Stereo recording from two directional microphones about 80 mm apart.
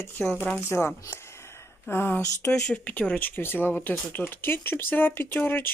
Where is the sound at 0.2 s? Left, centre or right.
Left.